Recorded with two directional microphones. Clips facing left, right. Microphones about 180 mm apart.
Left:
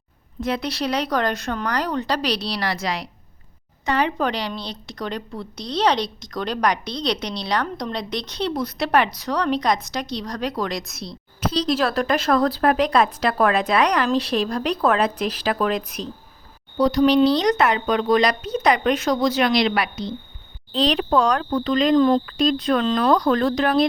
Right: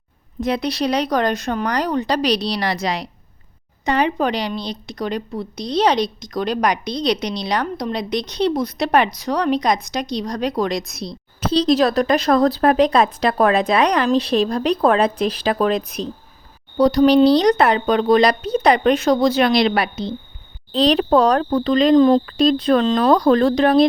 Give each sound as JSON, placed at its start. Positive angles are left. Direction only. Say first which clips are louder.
{"t": 0.4, "sound": "a woman's voice", "louder": "right 4 dB", "side_deg": -15}
{"t": 16.7, "sound": "speech", "louder": "right 4 dB", "side_deg": -35}